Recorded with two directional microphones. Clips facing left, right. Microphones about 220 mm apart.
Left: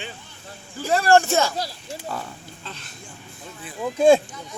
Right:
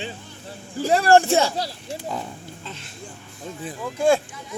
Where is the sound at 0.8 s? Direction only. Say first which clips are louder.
Right 1 dB; 35° right (ahead or behind).